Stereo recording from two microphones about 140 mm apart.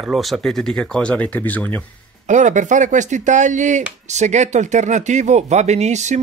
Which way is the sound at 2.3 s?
60° right (ahead or behind).